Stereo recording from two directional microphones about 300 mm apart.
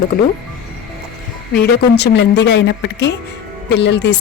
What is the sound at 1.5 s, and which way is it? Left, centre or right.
Speech, left.